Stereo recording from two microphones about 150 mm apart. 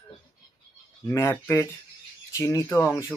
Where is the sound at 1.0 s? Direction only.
20° left (ahead or behind).